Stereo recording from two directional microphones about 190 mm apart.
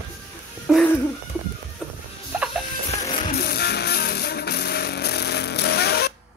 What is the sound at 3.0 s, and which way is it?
Music, 35° left (ahead or behind).